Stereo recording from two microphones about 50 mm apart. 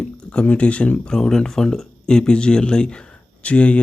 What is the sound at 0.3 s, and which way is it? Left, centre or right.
Speech, left.